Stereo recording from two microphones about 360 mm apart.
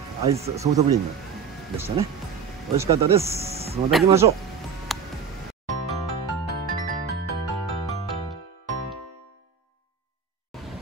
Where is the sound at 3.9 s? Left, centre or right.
Centre.